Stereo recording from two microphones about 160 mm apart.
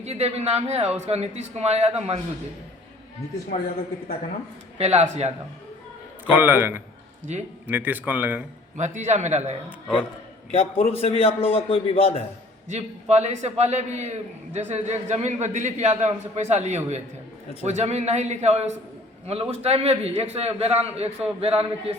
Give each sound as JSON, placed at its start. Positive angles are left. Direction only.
{"t": 0.0, "sound": "a man's voice", "side_deg": -40}
{"t": 4.8, "sound": "a man's voice", "side_deg": -40}
{"t": 6.3, "sound": "speech", "side_deg": -10}
{"t": 7.3, "sound": "a man's voice", "side_deg": -45}
{"t": 7.7, "sound": "speech", "side_deg": -10}
{"t": 8.8, "sound": "a man's voice", "side_deg": -45}
{"t": 9.6, "sound": "a man's voice", "side_deg": 10}
{"t": 10.5, "sound": "a man's voice", "side_deg": 40}
{"t": 12.6, "sound": "a man's voice", "side_deg": -45}